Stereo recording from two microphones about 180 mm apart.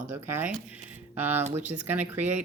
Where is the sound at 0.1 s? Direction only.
10° right (ahead or behind).